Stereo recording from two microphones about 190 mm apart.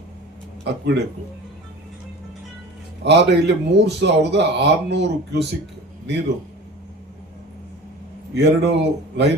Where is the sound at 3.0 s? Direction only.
60° right (ahead or behind).